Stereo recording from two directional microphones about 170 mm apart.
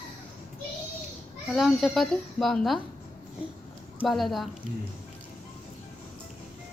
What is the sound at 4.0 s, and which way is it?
Speech, centre (ahead or behind).